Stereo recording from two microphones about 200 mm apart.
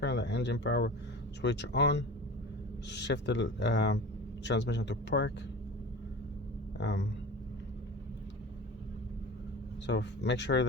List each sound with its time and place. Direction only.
0.0 s speech: 60° left (ahead or behind)
6.7 s speech: 60° left (ahead or behind)
9.8 s speech: 60° left (ahead or behind)